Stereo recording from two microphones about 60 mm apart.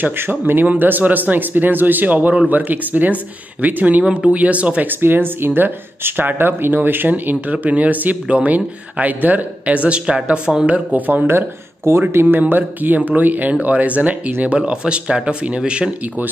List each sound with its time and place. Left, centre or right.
0.0 s speech: right
4.0 s speech: centre
4.8 s speech: right
9.8 s speech: centre
10.7 s speech: right
11.2 s speech: right; by 15.9 s centre